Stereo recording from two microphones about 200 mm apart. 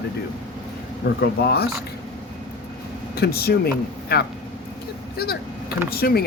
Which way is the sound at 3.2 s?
50° left (ahead or behind).